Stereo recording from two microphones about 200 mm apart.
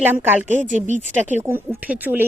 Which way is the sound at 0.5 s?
40° right (ahead or behind).